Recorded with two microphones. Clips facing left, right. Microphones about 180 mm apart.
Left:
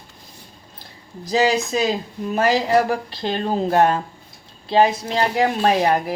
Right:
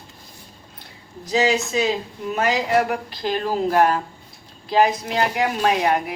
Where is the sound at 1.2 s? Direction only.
35° left (ahead or behind).